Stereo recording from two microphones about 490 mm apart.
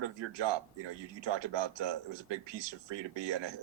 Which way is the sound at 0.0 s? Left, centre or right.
Right.